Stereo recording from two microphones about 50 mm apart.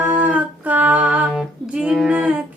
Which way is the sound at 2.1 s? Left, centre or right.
Right.